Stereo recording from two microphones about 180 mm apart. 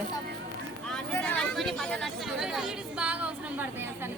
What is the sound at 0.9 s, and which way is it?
Speech, 5° left (ahead or behind).